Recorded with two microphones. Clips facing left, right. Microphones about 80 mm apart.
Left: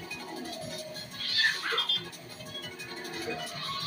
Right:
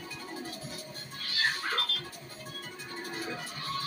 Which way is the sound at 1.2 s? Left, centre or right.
Left.